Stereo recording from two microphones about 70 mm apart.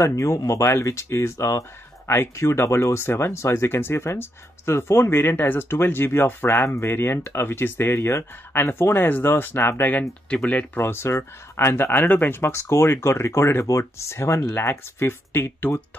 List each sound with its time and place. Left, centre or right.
0.0 s speech: left
10.3 s speech: centre
10.8 s speech: left